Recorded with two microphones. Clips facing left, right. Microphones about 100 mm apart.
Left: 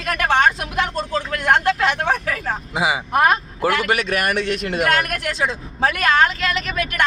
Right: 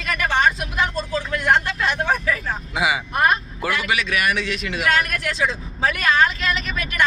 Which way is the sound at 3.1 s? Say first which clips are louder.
Left 3 dB; 55° left (ahead or behind).